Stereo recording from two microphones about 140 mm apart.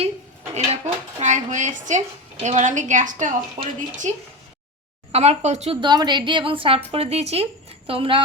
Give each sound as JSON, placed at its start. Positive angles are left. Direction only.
{"t": 0.5, "sound": "speech", "side_deg": -55}
{"t": 4.1, "sound": "speech", "side_deg": -55}
{"t": 5.8, "sound": "a woman's voice", "side_deg": -30}